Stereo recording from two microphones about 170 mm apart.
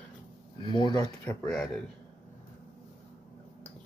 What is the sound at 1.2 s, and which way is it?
Speech, 5° left (ahead or behind).